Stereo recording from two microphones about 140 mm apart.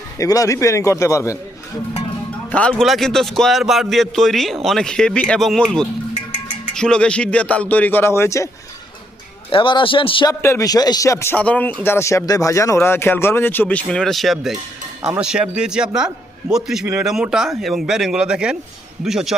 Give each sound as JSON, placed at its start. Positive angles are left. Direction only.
{"t": 0.2, "sound": "speech", "side_deg": 25}
{"t": 2.5, "sound": "a man's voice", "side_deg": 10}
{"t": 9.5, "sound": "speech", "side_deg": 35}
{"t": 10.4, "sound": "a man's voice", "side_deg": 20}